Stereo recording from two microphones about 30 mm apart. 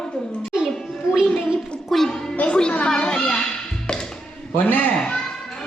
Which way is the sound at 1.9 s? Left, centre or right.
Centre.